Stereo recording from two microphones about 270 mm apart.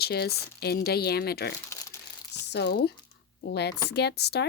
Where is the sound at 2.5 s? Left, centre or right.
Left.